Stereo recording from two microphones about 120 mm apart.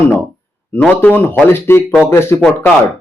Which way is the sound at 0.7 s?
15° left (ahead or behind).